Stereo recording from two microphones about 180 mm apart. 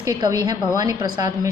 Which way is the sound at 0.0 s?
20° right (ahead or behind).